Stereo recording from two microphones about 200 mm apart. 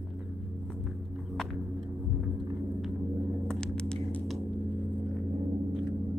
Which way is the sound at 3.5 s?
5° left (ahead or behind).